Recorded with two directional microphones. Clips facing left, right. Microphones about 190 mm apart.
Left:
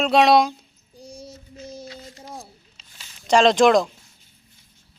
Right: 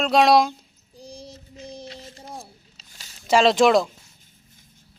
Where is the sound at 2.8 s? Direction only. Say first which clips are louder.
Even; 40° right (ahead or behind).